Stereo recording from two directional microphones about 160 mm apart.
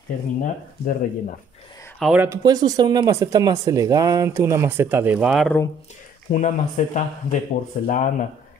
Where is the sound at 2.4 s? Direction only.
25° right (ahead or behind); by 5.5 s 5° right (ahead or behind).